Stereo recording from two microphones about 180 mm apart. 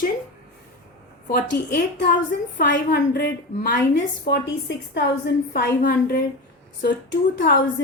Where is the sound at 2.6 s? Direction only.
70° left (ahead or behind).